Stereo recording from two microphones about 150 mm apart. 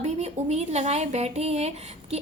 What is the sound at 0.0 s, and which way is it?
A woman's voice, 45° right (ahead or behind).